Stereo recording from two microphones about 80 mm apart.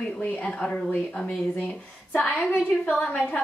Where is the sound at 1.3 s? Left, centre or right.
Centre.